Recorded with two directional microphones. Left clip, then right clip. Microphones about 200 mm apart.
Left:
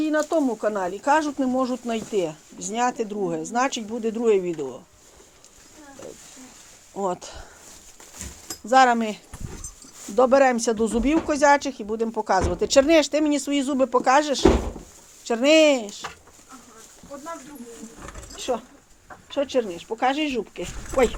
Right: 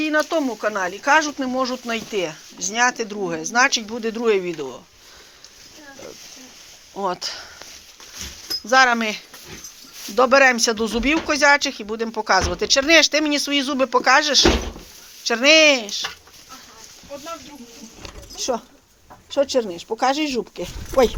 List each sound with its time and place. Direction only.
0.1 s speech: centre (ahead or behind)
0.8 s speech: 25° left (ahead or behind)
7.0 s speech: 20° left (ahead or behind)
8.7 s speech: 15° left (ahead or behind)
12.0 s speech: centre (ahead or behind)
12.5 s speech: 20° left (ahead or behind)
18.3 s speech: 25° right (ahead or behind)